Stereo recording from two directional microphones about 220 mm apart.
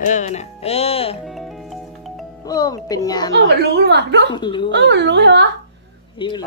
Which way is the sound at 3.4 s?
50° right (ahead or behind).